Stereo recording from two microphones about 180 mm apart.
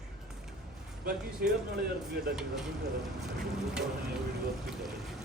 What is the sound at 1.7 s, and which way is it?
Speech, 60° right (ahead or behind).